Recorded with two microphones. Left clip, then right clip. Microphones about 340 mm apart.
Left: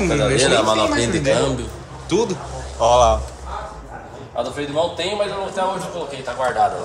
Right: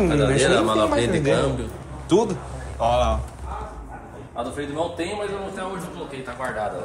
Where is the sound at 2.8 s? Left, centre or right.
Centre.